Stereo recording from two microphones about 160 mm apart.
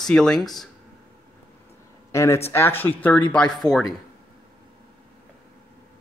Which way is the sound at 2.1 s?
20° left (ahead or behind).